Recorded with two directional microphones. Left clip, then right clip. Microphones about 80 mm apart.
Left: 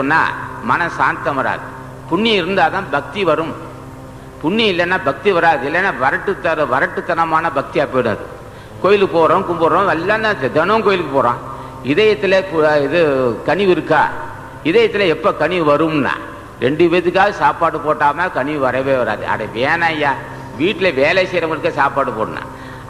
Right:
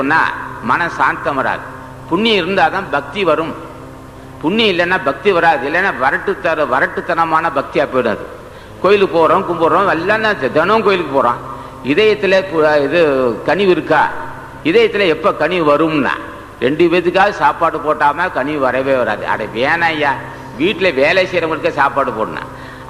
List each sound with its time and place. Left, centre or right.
0.0 s a man's voice: right